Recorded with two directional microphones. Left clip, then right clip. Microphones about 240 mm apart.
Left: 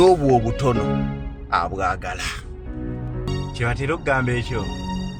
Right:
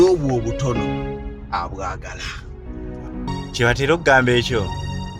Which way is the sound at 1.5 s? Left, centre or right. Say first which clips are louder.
Left 4 dB; left.